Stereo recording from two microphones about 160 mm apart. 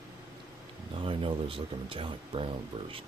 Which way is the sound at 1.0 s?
35° right (ahead or behind).